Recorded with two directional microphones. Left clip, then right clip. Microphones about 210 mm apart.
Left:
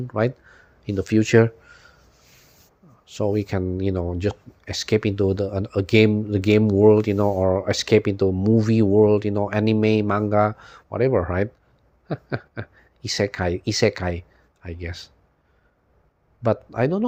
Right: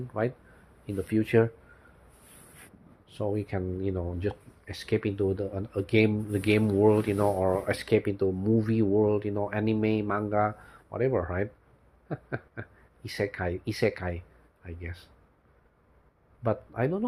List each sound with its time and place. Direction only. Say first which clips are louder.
0.1 s speech: left 7 dB; 45° left (ahead or behind)
3.1 s speech: left 8 dB; 45° left (ahead or behind)
16.4 s speech: left 7 dB; 50° left (ahead or behind)